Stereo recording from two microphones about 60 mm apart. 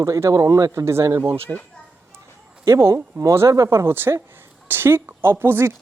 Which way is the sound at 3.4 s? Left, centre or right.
Right.